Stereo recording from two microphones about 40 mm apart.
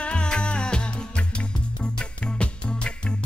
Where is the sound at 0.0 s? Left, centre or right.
Left.